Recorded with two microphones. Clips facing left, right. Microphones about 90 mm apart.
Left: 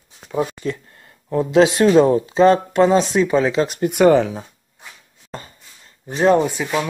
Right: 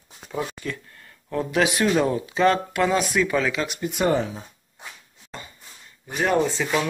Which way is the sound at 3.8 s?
70° left (ahead or behind).